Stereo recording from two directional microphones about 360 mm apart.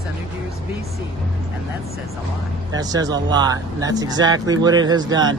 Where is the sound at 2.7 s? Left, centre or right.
Centre.